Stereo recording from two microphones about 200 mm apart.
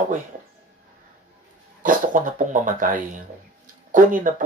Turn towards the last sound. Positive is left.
turn(degrees=-40)  # may be behind; listen again after turning